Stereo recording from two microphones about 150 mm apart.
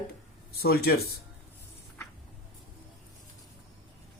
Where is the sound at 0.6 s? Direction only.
90° left.